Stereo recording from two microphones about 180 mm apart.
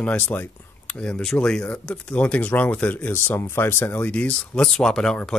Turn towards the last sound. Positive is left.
turn(degrees=5)  # may be behind; listen again after turning